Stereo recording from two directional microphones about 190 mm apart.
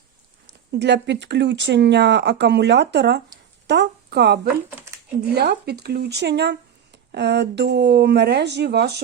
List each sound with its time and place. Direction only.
0.7 s speech: 60° right (ahead or behind)
3.7 s a sound: 60° right (ahead or behind)
5.3 s speech: 60° right (ahead or behind)